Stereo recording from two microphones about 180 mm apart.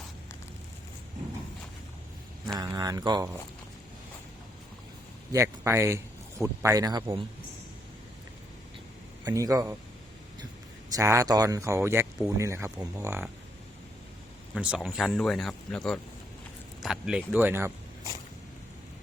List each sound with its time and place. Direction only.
2.6 s speech: 20° right (ahead or behind)
5.3 s speech: 15° right (ahead or behind)
9.2 s speech: 20° right (ahead or behind)
10.9 s speech: 20° right (ahead or behind)
14.5 s speech: centre (ahead or behind)